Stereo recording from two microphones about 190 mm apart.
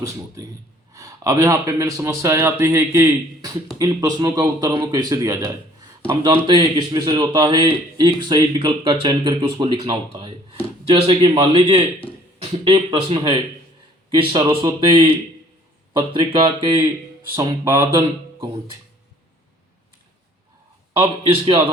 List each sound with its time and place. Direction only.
0.9 s a man's voice: 15° right (ahead or behind)
6.5 s a man's voice: 25° right (ahead or behind)
21.0 s speech: 30° right (ahead or behind)